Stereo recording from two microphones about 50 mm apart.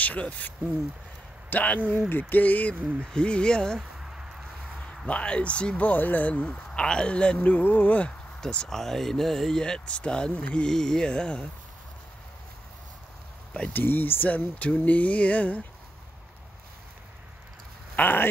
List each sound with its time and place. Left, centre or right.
0.0 s speech: left
1.5 s speech: left
2.0 s speech: left
2.7 s speech: right
3.1 s speech: centre
5.0 s speech: left
8.4 s speech: centre
8.6 s speech: centre
13.7 s speech: left
17.9 s speech: left